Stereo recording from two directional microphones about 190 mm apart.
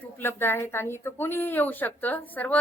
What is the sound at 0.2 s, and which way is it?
A woman's voice, 10° left (ahead or behind).